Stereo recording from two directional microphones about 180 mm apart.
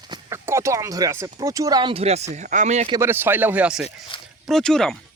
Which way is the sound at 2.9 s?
15° right (ahead or behind).